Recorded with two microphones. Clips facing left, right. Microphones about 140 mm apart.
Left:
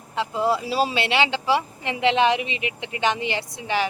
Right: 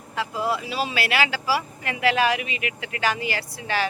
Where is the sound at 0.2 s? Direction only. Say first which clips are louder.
Left 3 dB; 25° left (ahead or behind).